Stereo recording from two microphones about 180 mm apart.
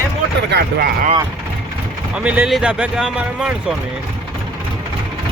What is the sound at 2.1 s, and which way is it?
Speech, 5° right (ahead or behind).